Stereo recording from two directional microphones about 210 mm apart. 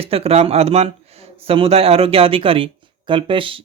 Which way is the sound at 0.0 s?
30° right (ahead or behind).